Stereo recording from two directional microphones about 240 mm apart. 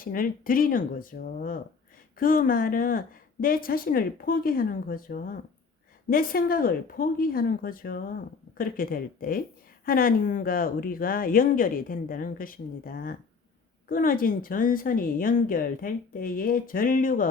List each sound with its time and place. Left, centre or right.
0.0 s speech: left